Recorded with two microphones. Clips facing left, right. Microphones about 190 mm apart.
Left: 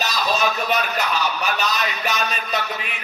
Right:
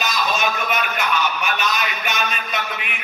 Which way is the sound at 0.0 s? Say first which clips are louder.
Left 1 dB; 35° left (ahead or behind).